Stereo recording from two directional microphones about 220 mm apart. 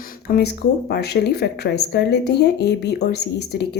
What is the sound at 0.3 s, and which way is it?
A woman's voice, 45° left (ahead or behind).